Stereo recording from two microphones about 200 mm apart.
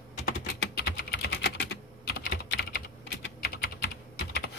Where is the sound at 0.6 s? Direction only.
55° left (ahead or behind).